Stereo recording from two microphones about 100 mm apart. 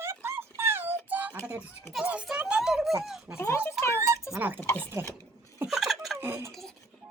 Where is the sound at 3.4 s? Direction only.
25° left (ahead or behind).